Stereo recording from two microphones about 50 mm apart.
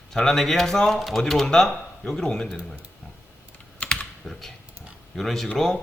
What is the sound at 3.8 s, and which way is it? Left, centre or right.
Typing, left.